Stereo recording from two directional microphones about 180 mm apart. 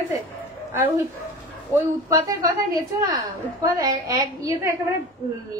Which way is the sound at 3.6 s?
20° right (ahead or behind).